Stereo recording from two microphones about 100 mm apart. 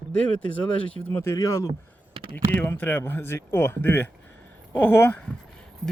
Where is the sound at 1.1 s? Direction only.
25° left (ahead or behind).